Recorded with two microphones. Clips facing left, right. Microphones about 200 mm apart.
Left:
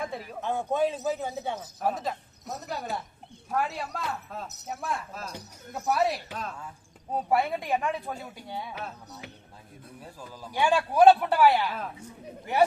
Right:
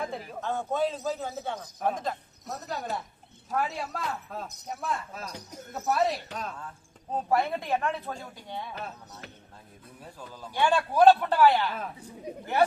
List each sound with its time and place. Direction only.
0.4 s a man's voice: 15° left (ahead or behind)
1.5 s a man's voice: 5° left (ahead or behind)